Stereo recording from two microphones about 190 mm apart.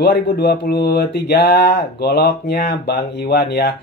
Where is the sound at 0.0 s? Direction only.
60° left (ahead or behind).